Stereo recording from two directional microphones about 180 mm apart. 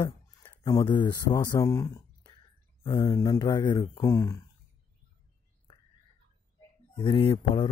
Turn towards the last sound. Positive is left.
turn(degrees=30)  # may be behind; listen again after turning